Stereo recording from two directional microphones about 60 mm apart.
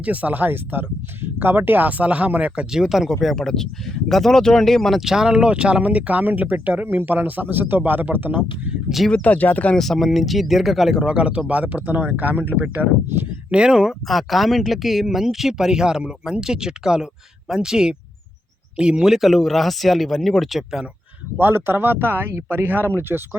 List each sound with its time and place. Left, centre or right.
0.0 s speech: right
2.7 s speech: centre; by 8.7 s right
9.0 s speech: left
9.7 s speech: centre
11.0 s speech: centre
13.5 s speech: centre
21.3 s speech: right